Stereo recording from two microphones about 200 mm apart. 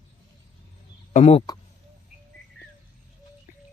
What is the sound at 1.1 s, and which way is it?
Speech, 30° left (ahead or behind).